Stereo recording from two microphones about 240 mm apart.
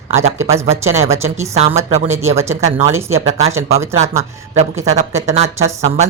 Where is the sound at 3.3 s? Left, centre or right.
Right.